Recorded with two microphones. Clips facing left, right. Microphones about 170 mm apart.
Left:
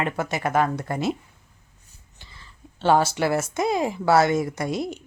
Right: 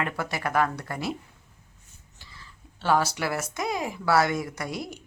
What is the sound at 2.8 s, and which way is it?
A woman's voice, 25° left (ahead or behind).